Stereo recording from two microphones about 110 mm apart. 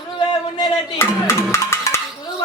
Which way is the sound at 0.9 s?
25° left (ahead or behind).